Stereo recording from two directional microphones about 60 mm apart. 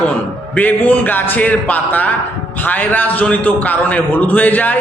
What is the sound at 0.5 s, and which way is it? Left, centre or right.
A man's voice, left.